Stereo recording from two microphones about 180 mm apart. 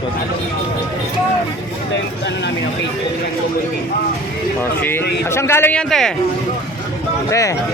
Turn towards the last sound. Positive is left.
turn(degrees=20)  # may be behind; listen again after turning